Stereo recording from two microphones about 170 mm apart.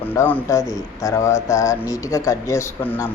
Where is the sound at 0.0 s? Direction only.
10° left (ahead or behind).